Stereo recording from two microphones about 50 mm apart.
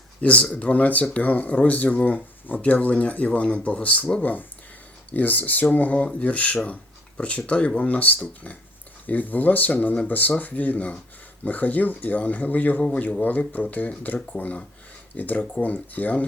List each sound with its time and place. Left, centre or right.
0.2 s speech: left